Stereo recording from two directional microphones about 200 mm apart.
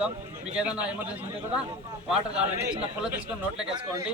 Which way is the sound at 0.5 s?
5° right (ahead or behind).